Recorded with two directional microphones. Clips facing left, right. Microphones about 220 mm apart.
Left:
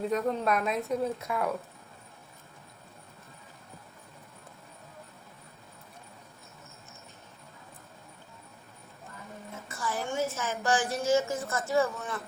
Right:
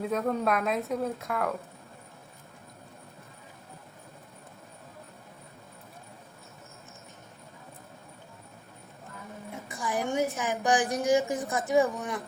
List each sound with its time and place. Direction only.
0.1 s speech: centre (ahead or behind)
9.6 s a woman's voice: 15° right (ahead or behind)